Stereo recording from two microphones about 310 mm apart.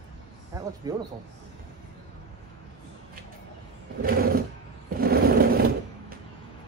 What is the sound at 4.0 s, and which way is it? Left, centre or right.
Sewing machine, right.